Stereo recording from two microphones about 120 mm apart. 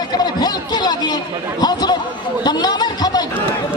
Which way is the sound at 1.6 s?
35° left (ahead or behind).